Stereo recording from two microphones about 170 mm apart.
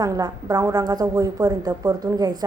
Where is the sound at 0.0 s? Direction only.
20° right (ahead or behind).